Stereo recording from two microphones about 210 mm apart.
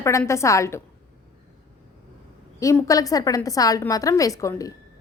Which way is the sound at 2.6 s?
15° left (ahead or behind).